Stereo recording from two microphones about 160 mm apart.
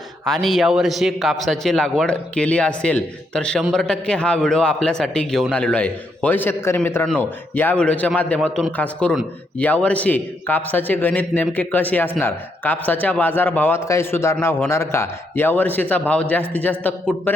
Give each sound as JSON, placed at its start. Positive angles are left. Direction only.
{"t": 0.3, "sound": "a man's voice", "side_deg": 0}